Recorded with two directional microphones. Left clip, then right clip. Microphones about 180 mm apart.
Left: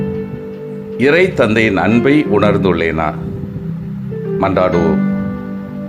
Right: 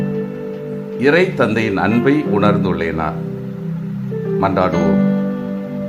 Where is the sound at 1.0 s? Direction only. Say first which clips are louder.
Left 3 dB; 20° left (ahead or behind).